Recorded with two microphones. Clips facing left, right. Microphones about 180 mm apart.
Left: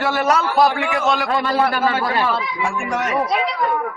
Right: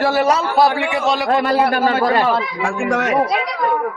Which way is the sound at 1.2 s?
45° right (ahead or behind).